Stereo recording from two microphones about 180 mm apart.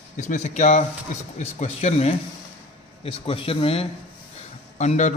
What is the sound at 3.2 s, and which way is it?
A man's voice, 30° left (ahead or behind).